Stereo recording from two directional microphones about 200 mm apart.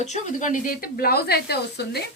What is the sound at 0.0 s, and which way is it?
A woman's voice, 35° left (ahead or behind).